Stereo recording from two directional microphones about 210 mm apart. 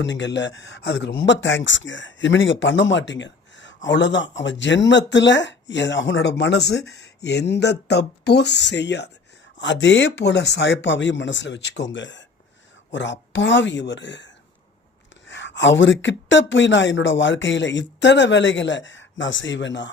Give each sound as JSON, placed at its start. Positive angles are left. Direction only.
{"t": 0.0, "sound": "speech", "side_deg": 60}